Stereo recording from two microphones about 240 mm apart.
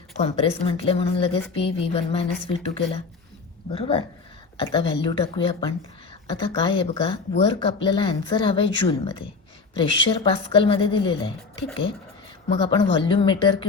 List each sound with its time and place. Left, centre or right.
0.2 s speech: left